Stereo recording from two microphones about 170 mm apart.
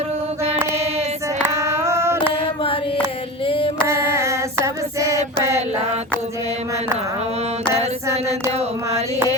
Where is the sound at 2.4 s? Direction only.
30° left (ahead or behind).